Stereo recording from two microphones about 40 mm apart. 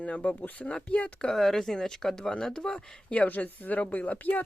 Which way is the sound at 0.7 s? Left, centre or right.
Left.